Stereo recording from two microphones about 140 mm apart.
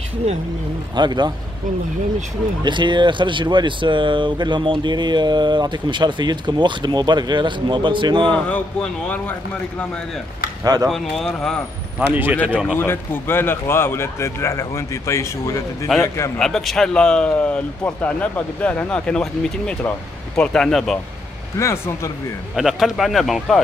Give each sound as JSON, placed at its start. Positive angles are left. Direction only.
{"t": 0.9, "sound": "speech", "side_deg": -30}
{"t": 2.6, "sound": "speech", "side_deg": -35}
{"t": 8.3, "sound": "speech", "side_deg": 10}
{"t": 10.6, "sound": "speech", "side_deg": -25}
{"t": 10.9, "sound": "speech", "side_deg": 5}
{"t": 12.1, "sound": "speech", "side_deg": -10}
{"t": 12.7, "sound": "speech", "side_deg": 15}
{"t": 16.3, "sound": "speech", "side_deg": 5}
{"t": 21.5, "sound": "speech", "side_deg": 20}
{"t": 22.6, "sound": "speech", "side_deg": 0}